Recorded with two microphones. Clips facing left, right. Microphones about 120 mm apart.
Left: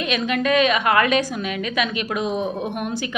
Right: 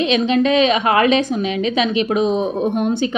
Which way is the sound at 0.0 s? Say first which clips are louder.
Right 7 dB; 25° right (ahead or behind).